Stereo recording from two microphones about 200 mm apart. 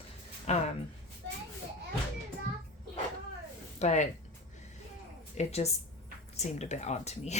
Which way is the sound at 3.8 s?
35° left (ahead or behind).